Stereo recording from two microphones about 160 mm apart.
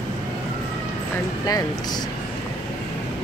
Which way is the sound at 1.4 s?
25° left (ahead or behind).